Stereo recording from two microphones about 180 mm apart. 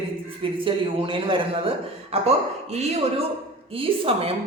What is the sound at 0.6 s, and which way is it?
Speech, 30° right (ahead or behind).